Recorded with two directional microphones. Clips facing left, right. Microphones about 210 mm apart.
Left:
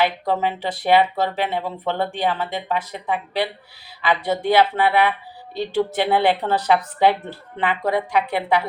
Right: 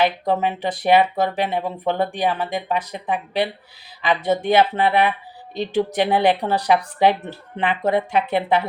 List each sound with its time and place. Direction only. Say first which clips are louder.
0.0 s a woman's voice: right 1 dB; 20° right (ahead or behind)